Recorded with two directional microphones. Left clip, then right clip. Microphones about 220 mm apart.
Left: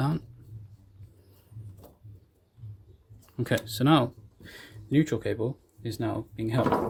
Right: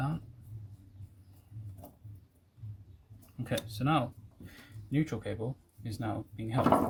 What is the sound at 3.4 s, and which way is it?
Speech, 50° left (ahead or behind).